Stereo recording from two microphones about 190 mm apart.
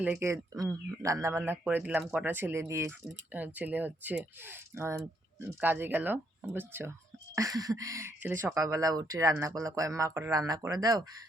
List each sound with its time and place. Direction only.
0.0 s speech: 10° right (ahead or behind)